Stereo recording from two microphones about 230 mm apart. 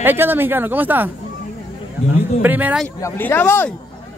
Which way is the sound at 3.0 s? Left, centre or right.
Centre.